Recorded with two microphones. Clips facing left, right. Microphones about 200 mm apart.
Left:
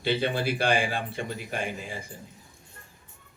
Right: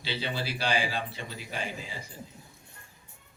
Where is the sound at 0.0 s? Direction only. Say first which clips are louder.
Left 8 dB; 55° left (ahead or behind).